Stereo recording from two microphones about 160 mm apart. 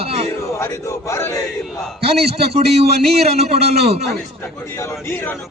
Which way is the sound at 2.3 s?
40° right (ahead or behind).